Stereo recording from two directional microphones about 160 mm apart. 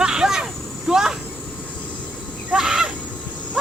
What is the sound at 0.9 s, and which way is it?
Speech, 5° right (ahead or behind).